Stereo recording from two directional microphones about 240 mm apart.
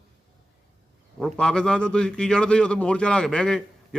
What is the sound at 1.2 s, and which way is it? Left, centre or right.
A man's voice, centre.